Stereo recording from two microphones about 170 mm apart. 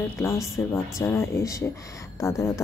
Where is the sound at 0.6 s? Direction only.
15° left (ahead or behind).